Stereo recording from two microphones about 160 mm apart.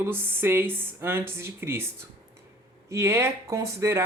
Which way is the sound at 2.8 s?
15° right (ahead or behind).